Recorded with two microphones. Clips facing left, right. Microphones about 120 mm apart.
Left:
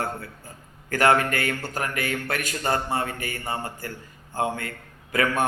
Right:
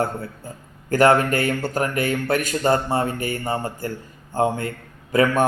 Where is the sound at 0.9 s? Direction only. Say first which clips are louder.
Right 4 dB; 25° right (ahead or behind).